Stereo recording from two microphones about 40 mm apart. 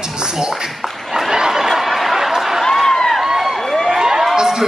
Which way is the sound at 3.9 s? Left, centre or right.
Centre.